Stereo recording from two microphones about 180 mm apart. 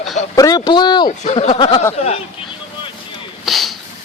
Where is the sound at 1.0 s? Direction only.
35° left (ahead or behind).